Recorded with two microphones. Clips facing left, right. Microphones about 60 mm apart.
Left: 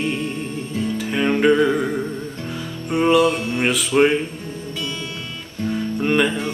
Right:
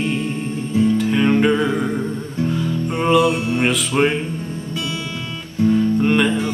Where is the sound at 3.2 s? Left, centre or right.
Centre.